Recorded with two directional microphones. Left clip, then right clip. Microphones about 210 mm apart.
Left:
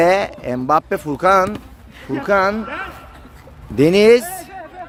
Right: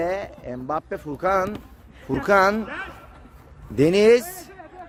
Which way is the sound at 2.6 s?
40° right (ahead or behind).